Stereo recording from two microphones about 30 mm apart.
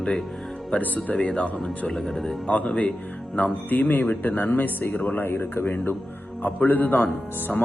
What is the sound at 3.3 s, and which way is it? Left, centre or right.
Speech, left.